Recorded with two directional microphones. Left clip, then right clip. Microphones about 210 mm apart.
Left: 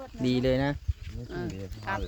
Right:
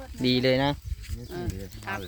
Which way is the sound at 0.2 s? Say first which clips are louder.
Right 3 dB; 10° right (ahead or behind).